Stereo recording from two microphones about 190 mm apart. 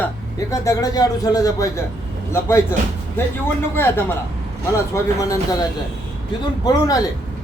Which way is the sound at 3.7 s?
10° left (ahead or behind).